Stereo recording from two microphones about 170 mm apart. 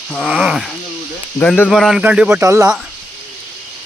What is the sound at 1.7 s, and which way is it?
Speech, centre (ahead or behind).